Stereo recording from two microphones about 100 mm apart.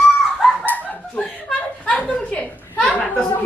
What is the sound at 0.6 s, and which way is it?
Chicken, 15° left (ahead or behind).